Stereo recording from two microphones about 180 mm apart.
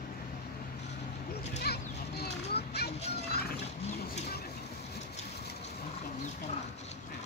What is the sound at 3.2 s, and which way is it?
Music, 65° left (ahead or behind).